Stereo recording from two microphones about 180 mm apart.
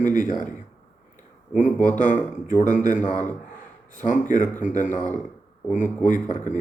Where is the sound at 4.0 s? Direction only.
45° left (ahead or behind).